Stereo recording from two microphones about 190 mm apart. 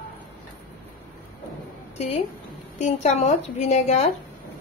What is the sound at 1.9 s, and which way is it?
A woman's voice, 35° left (ahead or behind).